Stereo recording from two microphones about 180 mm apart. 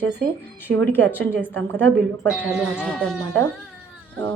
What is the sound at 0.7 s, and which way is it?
Speech, 80° right.